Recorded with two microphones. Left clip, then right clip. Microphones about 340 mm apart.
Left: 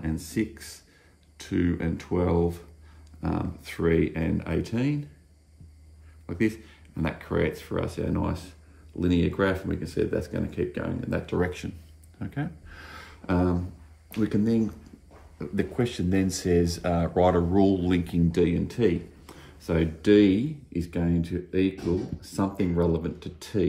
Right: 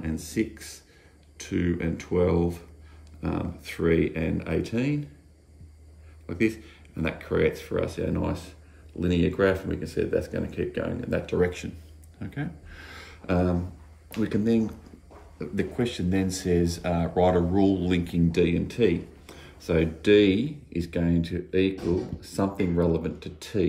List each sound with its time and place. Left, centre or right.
0.0 s speech: centre
6.2 s speech: centre
12.2 s a sound: centre
14.2 s speech: centre